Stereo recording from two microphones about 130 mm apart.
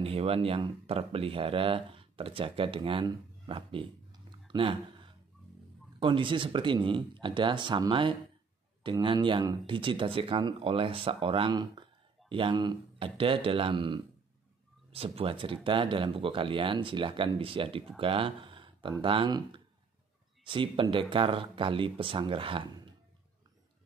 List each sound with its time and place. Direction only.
0.0 s speech: 50° right (ahead or behind)
5.9 s speech: 40° right (ahead or behind)
14.9 s speech: 50° right (ahead or behind)